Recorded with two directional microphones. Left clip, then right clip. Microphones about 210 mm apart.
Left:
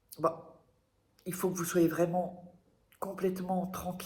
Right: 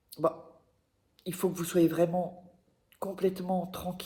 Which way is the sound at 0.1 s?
60° right (ahead or behind).